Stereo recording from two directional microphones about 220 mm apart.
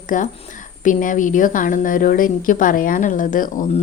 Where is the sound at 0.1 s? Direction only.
35° left (ahead or behind).